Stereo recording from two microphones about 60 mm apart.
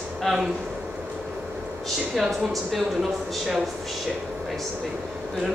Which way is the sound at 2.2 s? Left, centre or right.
Centre.